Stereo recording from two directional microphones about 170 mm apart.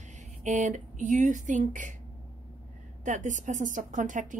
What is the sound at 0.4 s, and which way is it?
Speech, 45° right (ahead or behind).